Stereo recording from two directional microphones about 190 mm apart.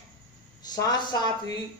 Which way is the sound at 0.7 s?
20° left (ahead or behind).